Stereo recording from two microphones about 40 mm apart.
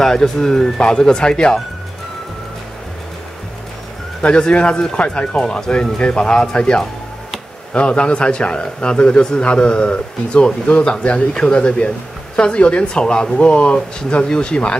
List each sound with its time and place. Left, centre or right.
0.0 s speech: centre
4.2 s a man's voice: left